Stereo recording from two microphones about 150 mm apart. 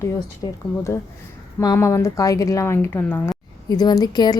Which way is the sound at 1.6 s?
20° left (ahead or behind).